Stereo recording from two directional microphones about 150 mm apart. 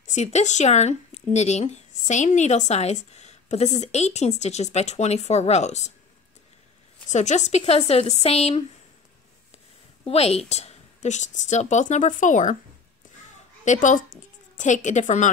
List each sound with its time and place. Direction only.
0.0 s speech: 50° left (ahead or behind)
7.1 s speech: 50° left (ahead or behind)
10.0 s speech: 40° left (ahead or behind); by 12.5 s 60° left (ahead or behind)
13.7 s speech: 55° left (ahead or behind)